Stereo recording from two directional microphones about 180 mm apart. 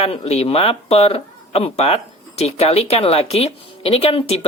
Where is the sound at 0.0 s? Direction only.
35° left (ahead or behind).